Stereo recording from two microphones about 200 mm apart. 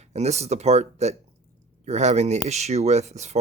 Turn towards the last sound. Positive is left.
turn(degrees=-35)  # may be behind; listen again after turning